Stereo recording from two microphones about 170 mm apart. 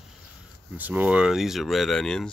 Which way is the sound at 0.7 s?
10° right (ahead or behind).